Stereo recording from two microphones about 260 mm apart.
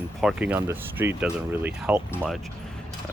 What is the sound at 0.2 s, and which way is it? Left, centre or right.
Speech, centre.